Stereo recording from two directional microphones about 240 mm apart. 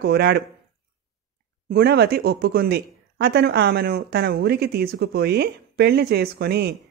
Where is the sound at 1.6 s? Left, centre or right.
Right.